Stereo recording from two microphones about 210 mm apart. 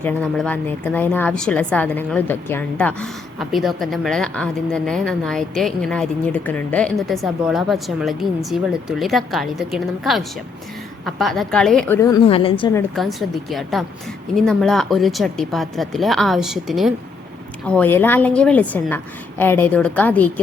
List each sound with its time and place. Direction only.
0.0 s a woman's voice: 5° left (ahead or behind)
12.3 s a woman's voice: 25° left (ahead or behind)
13.0 s a woman's voice: centre (ahead or behind)